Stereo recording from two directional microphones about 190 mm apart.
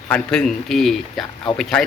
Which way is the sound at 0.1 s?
5° left (ahead or behind).